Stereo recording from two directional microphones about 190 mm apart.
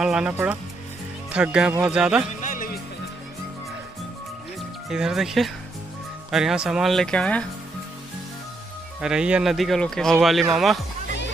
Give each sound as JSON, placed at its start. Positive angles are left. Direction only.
{"t": 0.0, "sound": "speech", "side_deg": -5}
{"t": 2.2, "sound": "music", "side_deg": 45}
{"t": 4.6, "sound": "speech", "side_deg": 0}
{"t": 9.0, "sound": "speech", "side_deg": -5}